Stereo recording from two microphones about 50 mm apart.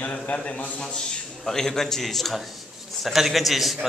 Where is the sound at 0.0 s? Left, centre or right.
Left.